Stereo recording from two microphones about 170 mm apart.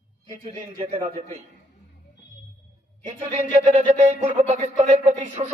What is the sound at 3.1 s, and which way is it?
Speech, 35° right (ahead or behind).